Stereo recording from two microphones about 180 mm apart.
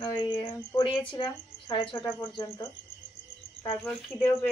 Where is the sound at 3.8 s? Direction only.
Centre (ahead or behind).